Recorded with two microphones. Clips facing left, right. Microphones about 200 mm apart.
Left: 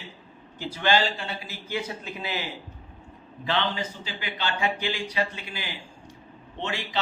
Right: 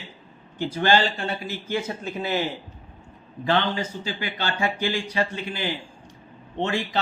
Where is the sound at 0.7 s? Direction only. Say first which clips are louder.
Right 2 dB; 50° right (ahead or behind).